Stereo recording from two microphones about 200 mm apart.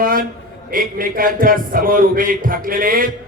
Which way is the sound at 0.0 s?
45° right (ahead or behind).